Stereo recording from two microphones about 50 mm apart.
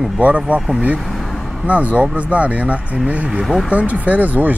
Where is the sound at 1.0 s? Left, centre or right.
Centre.